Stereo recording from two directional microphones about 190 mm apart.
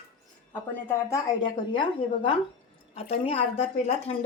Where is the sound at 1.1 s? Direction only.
25° left (ahead or behind).